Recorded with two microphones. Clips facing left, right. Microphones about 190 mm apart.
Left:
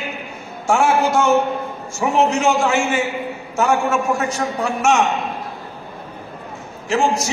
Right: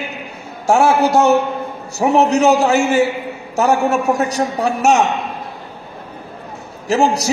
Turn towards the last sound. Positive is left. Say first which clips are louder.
# right 3 dB
turn(degrees=-35)  # may be behind; listen again after turning